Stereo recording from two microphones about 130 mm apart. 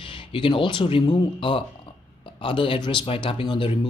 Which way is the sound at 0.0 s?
40° left (ahead or behind).